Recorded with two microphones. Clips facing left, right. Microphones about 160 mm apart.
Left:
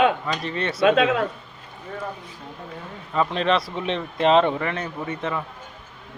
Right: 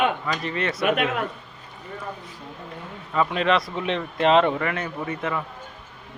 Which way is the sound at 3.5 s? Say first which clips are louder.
Even; centre (ahead or behind).